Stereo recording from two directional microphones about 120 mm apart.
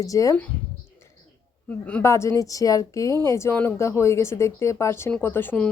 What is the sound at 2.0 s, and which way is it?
A woman's voice, 25° left (ahead or behind).